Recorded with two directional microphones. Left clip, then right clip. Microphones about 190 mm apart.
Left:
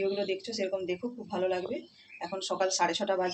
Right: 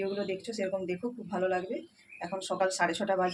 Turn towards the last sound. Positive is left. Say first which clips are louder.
# even
turn(degrees=-15)  # may be behind; listen again after turning